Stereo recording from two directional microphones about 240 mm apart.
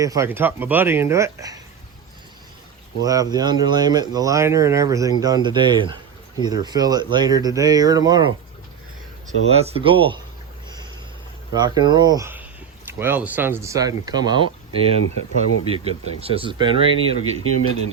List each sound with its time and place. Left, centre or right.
0.0 s speech: centre
3.0 s speech: centre
9.6 s speech: right
11.5 s speech: centre
15.0 s speech: left
16.2 s speech: right
17.4 s a man's voice: right